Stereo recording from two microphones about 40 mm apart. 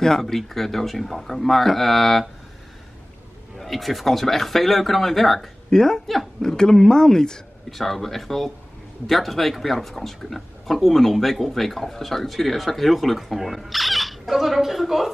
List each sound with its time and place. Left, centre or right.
0.0 s speech: centre
3.5 s speech: centre
5.7 s speech: centre
7.7 s speech: centre